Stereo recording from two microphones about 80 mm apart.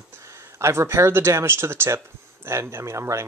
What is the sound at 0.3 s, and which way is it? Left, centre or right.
Speech, right.